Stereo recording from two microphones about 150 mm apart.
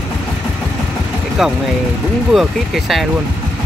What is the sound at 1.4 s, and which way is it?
Speech, centre (ahead or behind).